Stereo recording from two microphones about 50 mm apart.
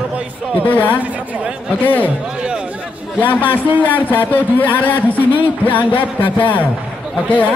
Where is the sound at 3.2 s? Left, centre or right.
Left.